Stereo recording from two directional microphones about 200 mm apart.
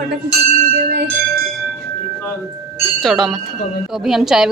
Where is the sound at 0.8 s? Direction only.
60° right (ahead or behind).